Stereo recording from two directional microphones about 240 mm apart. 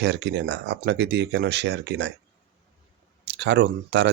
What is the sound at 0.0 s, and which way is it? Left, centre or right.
Speech, right.